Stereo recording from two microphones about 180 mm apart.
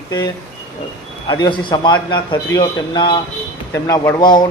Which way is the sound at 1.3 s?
25° left (ahead or behind).